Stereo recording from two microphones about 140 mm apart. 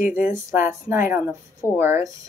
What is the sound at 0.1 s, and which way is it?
Speech, 20° right (ahead or behind).